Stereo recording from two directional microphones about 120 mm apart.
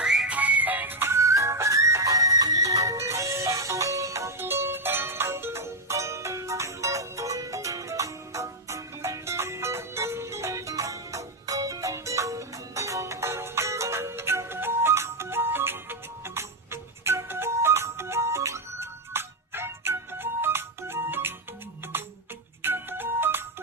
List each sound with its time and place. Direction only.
0.0 s music: 5° right (ahead or behind)